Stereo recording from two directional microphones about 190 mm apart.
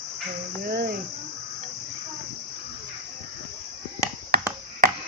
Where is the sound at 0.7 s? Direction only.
55° right (ahead or behind).